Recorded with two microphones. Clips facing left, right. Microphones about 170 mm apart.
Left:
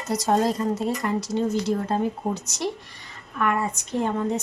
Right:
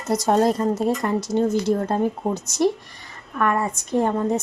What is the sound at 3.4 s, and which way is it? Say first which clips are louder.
Speech: right 2 dB; 45° right (ahead or behind).